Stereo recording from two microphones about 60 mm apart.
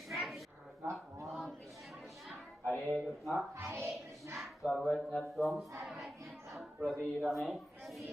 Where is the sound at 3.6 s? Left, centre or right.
Right.